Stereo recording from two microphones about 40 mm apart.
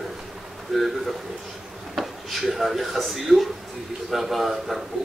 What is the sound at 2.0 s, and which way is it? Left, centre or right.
Speech, centre.